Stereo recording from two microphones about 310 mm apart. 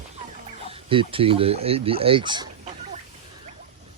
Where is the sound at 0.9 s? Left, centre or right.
Centre.